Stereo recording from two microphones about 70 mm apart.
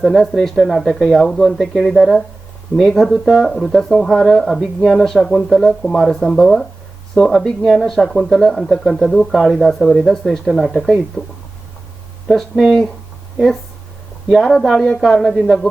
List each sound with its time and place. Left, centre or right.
0.0 s speech: centre
11.2 s speech: centre
12.4 s speech: centre
14.3 s speech: centre
15.1 s speech: centre